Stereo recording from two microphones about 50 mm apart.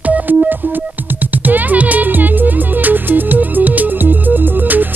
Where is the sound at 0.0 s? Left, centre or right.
Right.